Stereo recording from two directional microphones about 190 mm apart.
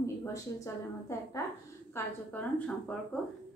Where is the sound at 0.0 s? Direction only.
15° left (ahead or behind).